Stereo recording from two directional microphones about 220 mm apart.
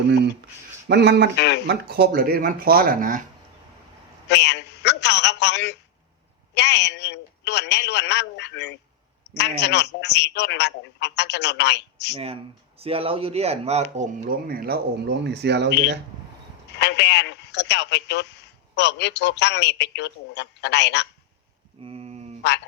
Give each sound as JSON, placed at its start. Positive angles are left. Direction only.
{"t": 0.9, "sound": "speech", "side_deg": -50}
{"t": 1.4, "sound": "a man's voice", "side_deg": 50}
{"t": 1.6, "sound": "speech", "side_deg": -45}
{"t": 4.3, "sound": "a sound", "side_deg": 50}
{"t": 6.5, "sound": "a man's voice", "side_deg": 50}
{"t": 12.1, "sound": "speech", "side_deg": -25}
{"t": 16.7, "sound": "a man's voice", "side_deg": 50}
{"t": 21.8, "sound": "a sound", "side_deg": -25}